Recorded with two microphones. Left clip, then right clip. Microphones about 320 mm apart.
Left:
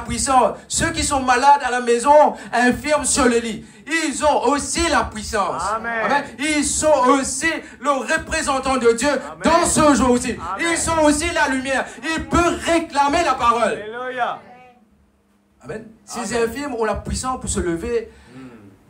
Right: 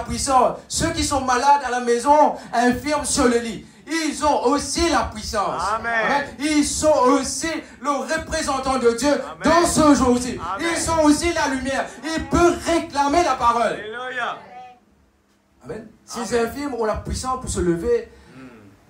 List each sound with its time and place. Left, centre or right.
0.1 s a man's voice: left
5.7 s a man's voice: centre
6.0 s a man's voice: left
13.8 s a sound: centre
16.2 s a man's voice: left